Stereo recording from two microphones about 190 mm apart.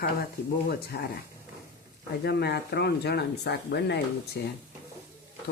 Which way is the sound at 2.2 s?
60° left (ahead or behind).